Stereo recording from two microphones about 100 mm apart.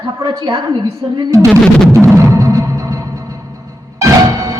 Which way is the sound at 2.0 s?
30° right (ahead or behind).